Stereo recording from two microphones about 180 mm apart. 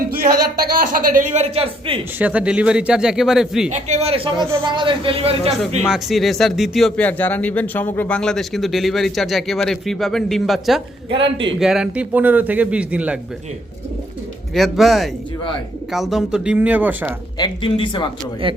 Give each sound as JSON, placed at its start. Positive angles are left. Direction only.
{"t": 0.1, "sound": "speech", "side_deg": -55}
{"t": 2.1, "sound": "speech", "side_deg": -10}
{"t": 3.7, "sound": "a man's voice", "side_deg": -40}
{"t": 5.9, "sound": "speech", "side_deg": 0}
{"t": 14.5, "sound": "speech", "side_deg": 0}
{"t": 17.3, "sound": "speech", "side_deg": 25}
{"t": 18.4, "sound": "a man's voice", "side_deg": -30}